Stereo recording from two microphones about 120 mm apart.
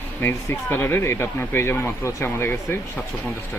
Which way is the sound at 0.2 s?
20° left (ahead or behind).